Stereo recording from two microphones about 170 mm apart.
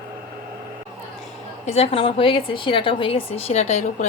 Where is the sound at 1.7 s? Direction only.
35° left (ahead or behind).